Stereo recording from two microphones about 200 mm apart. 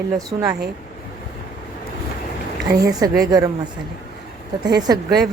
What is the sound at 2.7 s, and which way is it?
Speech, 20° right (ahead or behind).